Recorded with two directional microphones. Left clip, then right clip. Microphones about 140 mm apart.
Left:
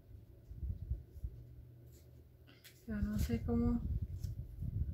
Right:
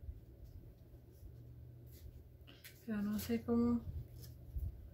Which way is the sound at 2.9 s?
20° right (ahead or behind).